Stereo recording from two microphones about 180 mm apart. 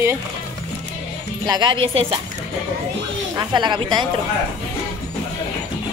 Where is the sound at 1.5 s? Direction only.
25° right (ahead or behind).